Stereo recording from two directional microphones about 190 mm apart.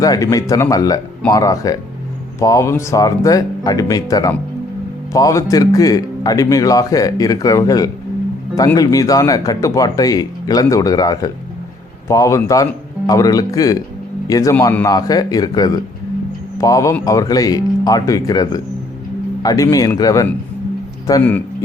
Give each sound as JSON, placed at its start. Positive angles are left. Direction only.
{"t": 0.0, "sound": "speech", "side_deg": 20}